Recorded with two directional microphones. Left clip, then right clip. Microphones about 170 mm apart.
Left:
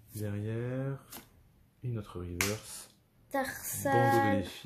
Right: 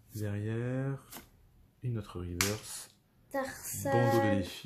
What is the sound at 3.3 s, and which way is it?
A woman's voice, 30° left (ahead or behind).